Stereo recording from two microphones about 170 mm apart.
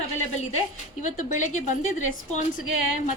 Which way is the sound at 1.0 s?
45° left (ahead or behind).